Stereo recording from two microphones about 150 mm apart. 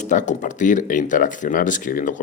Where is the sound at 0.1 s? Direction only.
55° left (ahead or behind).